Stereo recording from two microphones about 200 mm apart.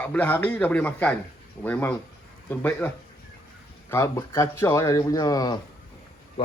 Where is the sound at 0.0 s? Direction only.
10° left (ahead or behind).